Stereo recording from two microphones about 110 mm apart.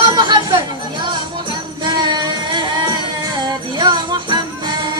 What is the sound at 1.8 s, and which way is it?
Music, 40° right (ahead or behind).